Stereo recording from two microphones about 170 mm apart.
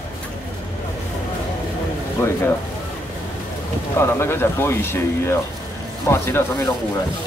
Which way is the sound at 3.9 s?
15° left (ahead or behind).